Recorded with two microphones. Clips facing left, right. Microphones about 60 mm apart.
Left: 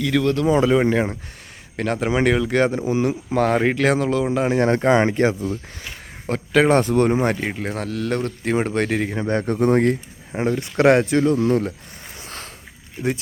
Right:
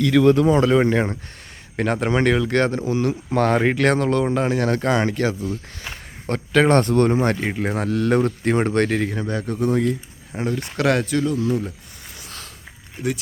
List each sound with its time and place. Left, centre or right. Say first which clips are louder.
0.0 s speech: right 4 dB; centre
2.8 s speech: left 1 dB; left
3.2 s speech: right 1 dB; centre
4.4 s speech: left 3 dB; left
6.2 s speech: even; centre
7.3 s speech: right 2 dB; centre
9.2 s speech: left 4 dB; left
10.3 s speech: left 4 dB; left
11.3 s speech: left 3 dB; left